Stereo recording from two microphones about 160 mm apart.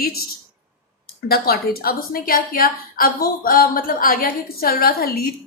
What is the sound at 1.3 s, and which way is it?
A woman's voice, 70° left (ahead or behind).